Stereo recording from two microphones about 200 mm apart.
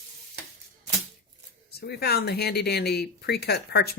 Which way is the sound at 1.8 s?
55° left (ahead or behind).